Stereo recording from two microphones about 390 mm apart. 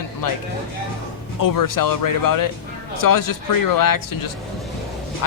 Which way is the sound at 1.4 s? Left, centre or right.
Left.